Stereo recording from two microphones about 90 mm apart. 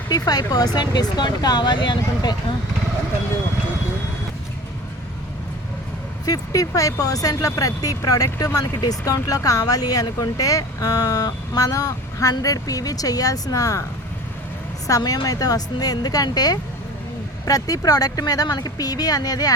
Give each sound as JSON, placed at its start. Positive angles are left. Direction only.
{"t": 0.1, "sound": "speech", "side_deg": 45}
{"t": 6.2, "sound": "speech", "side_deg": 40}
{"t": 14.8, "sound": "speech", "side_deg": 40}